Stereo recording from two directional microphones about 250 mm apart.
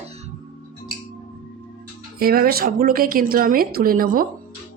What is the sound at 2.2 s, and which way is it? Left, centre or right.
Speech, right.